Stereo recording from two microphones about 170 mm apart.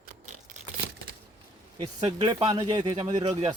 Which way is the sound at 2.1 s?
35° right (ahead or behind).